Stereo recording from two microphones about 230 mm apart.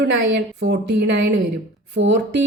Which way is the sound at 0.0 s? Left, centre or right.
Right.